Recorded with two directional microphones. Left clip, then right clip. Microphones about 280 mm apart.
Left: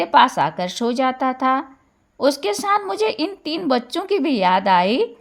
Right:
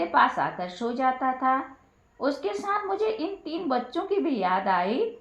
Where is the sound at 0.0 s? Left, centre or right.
Left.